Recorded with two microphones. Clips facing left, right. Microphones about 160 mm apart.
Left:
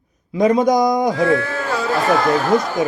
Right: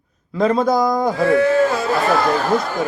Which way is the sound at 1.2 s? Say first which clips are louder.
Right 3 dB; 25° right (ahead or behind).